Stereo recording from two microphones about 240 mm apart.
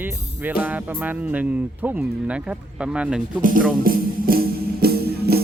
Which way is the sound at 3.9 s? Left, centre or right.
Right.